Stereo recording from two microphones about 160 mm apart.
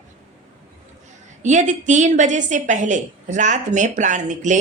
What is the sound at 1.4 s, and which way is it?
A woman's voice, 50° right (ahead or behind).